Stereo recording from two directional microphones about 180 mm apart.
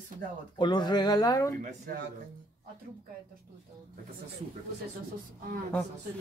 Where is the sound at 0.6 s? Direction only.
25° left (ahead or behind).